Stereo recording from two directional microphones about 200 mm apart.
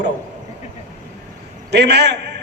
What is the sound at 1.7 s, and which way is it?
Speech, 55° right (ahead or behind).